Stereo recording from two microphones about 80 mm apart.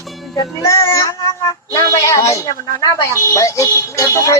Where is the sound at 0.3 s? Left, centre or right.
Left.